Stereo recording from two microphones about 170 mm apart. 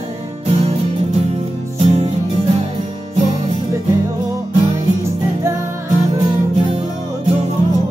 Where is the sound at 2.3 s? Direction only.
30° right (ahead or behind).